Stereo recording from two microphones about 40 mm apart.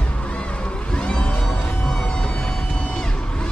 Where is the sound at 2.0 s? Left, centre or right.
Left.